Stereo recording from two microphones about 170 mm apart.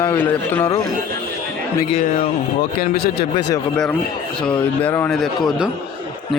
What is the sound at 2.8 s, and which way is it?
Speech, 70° left (ahead or behind).